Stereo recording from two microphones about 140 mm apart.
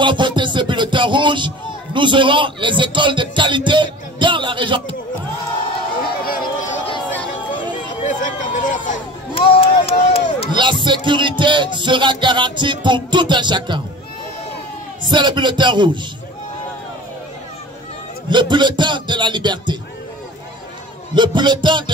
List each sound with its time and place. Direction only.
0.0 s music: 35° right (ahead or behind)
6.0 s run: 90° left
8.0 s speech: 65° left (ahead or behind)
9.3 s speech: 40° left (ahead or behind)
10.5 s music: 35° right (ahead or behind)
15.0 s music: 35° right (ahead or behind)
18.3 s music: 35° right (ahead or behind)
21.1 s music: 35° right (ahead or behind)